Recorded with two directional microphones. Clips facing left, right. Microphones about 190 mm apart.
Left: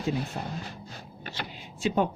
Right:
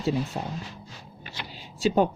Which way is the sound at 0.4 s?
35° right (ahead or behind).